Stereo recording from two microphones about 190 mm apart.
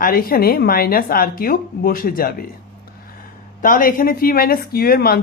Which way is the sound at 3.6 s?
45° left (ahead or behind).